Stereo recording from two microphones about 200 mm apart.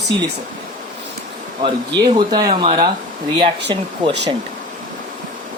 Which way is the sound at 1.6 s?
25° right (ahead or behind).